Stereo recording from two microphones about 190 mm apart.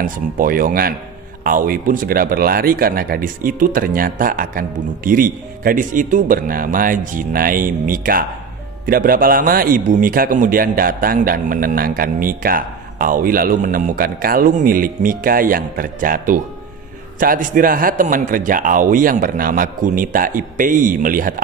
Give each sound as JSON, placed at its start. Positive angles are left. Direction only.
{"t": 0.0, "sound": "a man's voice", "side_deg": -50}